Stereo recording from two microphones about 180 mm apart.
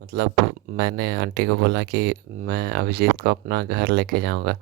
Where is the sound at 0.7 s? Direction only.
65° right (ahead or behind).